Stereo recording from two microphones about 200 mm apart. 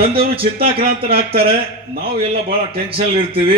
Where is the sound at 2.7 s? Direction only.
30° right (ahead or behind).